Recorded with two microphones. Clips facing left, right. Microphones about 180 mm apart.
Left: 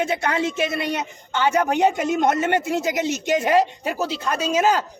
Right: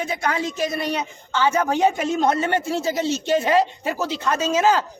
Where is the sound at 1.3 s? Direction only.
20° left (ahead or behind).